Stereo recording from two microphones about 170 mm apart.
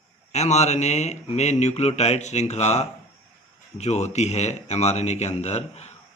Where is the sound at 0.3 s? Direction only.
40° left (ahead or behind).